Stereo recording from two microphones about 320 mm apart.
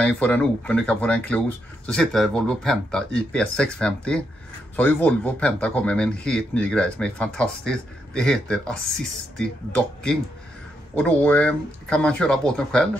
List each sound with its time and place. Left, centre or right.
0.0 s speech: centre
11.0 s speech: centre